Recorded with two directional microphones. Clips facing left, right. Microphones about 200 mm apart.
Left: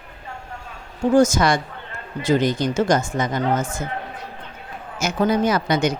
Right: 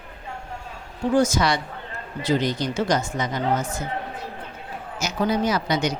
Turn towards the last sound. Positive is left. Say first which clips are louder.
# left 3 dB
turn(degrees=55)  # may be behind; listen again after turning